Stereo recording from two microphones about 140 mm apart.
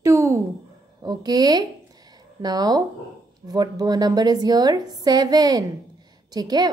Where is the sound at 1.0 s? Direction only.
30° right (ahead or behind).